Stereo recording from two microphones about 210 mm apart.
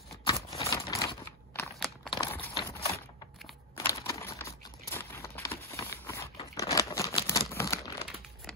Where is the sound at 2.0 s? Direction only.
20° left (ahead or behind).